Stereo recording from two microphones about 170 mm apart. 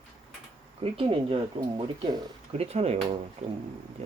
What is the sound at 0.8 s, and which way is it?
Speech, 35° right (ahead or behind).